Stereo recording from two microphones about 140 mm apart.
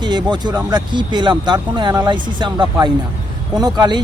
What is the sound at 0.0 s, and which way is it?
Speech, 30° right (ahead or behind).